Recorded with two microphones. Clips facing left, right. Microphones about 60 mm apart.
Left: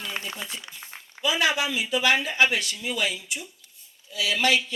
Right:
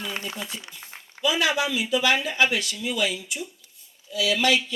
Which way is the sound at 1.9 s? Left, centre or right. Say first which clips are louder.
Even; left.